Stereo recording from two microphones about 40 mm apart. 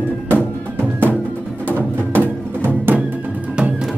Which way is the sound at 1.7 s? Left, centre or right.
Right.